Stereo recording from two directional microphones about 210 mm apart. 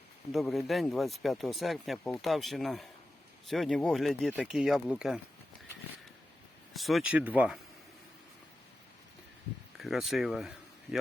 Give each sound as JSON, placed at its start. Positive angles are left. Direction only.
{"t": 0.3, "sound": "speech", "side_deg": 0}
{"t": 6.7, "sound": "speech", "side_deg": 0}
{"t": 9.7, "sound": "speech", "side_deg": 0}